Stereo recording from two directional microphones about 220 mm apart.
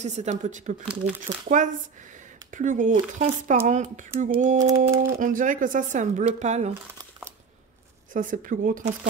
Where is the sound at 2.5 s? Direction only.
35° right (ahead or behind).